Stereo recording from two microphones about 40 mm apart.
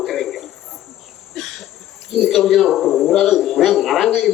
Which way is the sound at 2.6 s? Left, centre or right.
Centre.